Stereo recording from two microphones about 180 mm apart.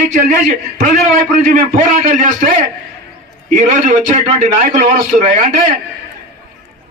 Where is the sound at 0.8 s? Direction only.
45° right (ahead or behind).